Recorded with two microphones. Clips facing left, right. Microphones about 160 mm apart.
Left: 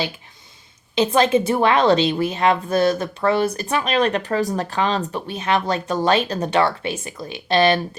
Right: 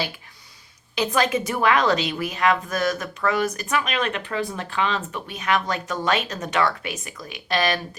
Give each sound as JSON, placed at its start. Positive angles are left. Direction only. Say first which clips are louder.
{"t": 0.9, "sound": "a woman's voice", "louder": "left 6 dB", "side_deg": 25}